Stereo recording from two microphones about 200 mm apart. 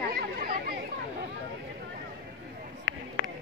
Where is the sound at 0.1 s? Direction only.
45° right (ahead or behind).